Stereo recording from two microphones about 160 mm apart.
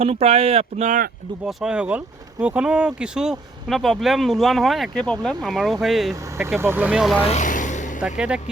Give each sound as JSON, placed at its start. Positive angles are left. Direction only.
{"t": 0.0, "sound": "speech", "side_deg": -40}
{"t": 1.5, "sound": "speech", "side_deg": -5}
{"t": 6.6, "sound": "speech", "side_deg": -15}
{"t": 7.3, "sound": "vehicle", "side_deg": 50}
{"t": 8.0, "sound": "speech", "side_deg": -5}